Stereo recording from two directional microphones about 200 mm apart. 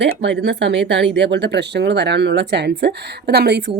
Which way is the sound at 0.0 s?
60° right (ahead or behind).